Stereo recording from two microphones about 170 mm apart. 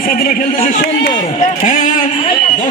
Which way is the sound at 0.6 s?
50° left (ahead or behind).